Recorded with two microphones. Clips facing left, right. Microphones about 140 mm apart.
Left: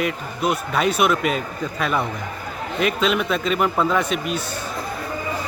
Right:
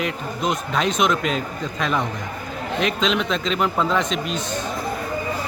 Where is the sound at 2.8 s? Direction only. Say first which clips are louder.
Left 1 dB; 5° left (ahead or behind).